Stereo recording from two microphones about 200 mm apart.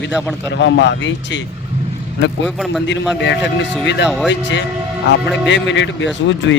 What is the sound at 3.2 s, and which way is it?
Speech, 65° left (ahead or behind).